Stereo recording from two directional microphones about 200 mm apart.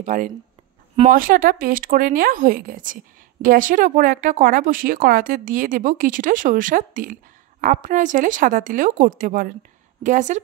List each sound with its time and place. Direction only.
0.0 s a woman's voice: 40° right (ahead or behind)